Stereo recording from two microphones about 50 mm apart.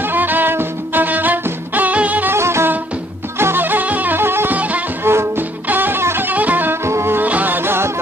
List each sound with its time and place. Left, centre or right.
0.0 s music: right
2.3 s music: right
3.3 s music: right
4.2 s music: right
4.6 s music: right
5.0 s music: right
5.7 s music: right
6.3 s music: right
6.7 s music: right
7.2 s music: right